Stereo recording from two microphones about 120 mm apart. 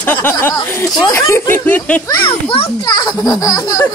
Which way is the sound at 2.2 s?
50° left (ahead or behind).